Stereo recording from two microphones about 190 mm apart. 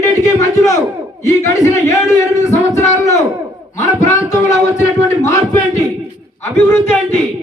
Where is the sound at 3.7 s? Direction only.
15° left (ahead or behind).